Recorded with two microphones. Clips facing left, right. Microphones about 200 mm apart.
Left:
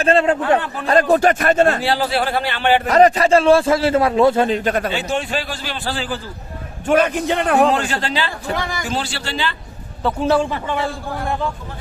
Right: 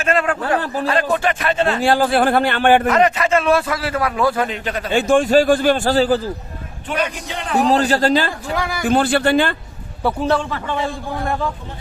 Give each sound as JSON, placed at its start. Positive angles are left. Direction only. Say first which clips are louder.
{"t": 0.0, "sound": "a man's voice", "louder": "left 4 dB", "side_deg": 30}
{"t": 0.6, "sound": "a man's voice", "louder": "right 5 dB", "side_deg": -35}
{"t": 0.9, "sound": "speech", "louder": "left 6 dB", "side_deg": 40}
{"t": 1.8, "sound": "a man's voice", "louder": "right 4 dB", "side_deg": -50}
{"t": 2.8, "sound": "a man's voice", "louder": "left 3 dB", "side_deg": 35}
{"t": 4.6, "sound": "speech", "louder": "left 5 dB", "side_deg": 50}
{"t": 4.9, "sound": "a man's voice", "louder": "right 8 dB", "side_deg": -50}
{"t": 6.8, "sound": "a man's voice", "louder": "left 8 dB", "side_deg": 50}
{"t": 7.7, "sound": "a man's voice", "louder": "right 5 dB", "side_deg": -35}
{"t": 8.5, "sound": "speech", "louder": "right 3 dB", "side_deg": -10}
{"t": 8.8, "sound": "speech", "louder": "right 9 dB", "side_deg": -55}
{"t": 10.0, "sound": "speech", "louder": "right 1 dB", "side_deg": -10}
{"t": 10.5, "sound": "a man's voice", "louder": "left 1 dB", "side_deg": 15}